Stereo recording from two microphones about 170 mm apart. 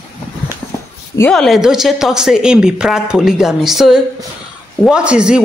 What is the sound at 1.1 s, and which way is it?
Speech, 5° left (ahead or behind).